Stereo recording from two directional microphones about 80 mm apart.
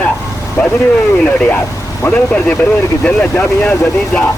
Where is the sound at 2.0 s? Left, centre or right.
Centre.